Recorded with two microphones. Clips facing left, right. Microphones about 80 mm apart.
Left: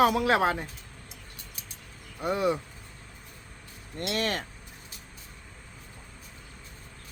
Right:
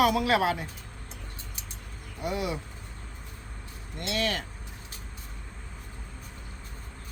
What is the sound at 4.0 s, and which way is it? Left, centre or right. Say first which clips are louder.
Speech: even; left.